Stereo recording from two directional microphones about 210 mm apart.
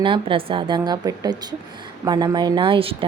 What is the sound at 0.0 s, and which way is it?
Speech, 25° right (ahead or behind).